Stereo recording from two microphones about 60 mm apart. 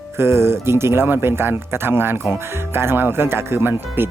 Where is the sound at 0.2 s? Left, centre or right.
Right.